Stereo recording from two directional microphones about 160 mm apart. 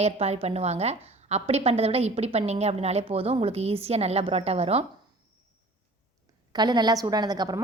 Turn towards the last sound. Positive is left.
turn(degrees=-25)  # may be behind; listen again after turning